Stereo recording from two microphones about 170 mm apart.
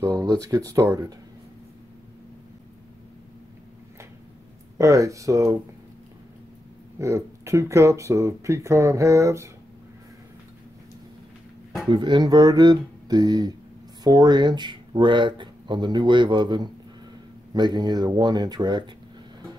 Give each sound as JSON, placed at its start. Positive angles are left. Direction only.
{"t": 0.0, "sound": "speech", "side_deg": -20}
{"t": 4.7, "sound": "speech", "side_deg": -20}
{"t": 7.0, "sound": "speech", "side_deg": -20}
{"t": 11.9, "sound": "speech", "side_deg": -25}